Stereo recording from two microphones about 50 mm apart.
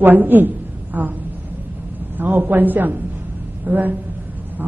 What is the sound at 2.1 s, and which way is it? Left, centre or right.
A man's voice, right.